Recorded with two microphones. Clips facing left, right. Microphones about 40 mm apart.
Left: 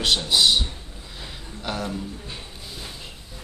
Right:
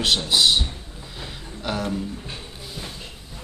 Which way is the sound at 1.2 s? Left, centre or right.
Centre.